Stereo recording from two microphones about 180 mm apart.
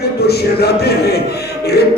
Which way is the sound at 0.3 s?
65° left (ahead or behind).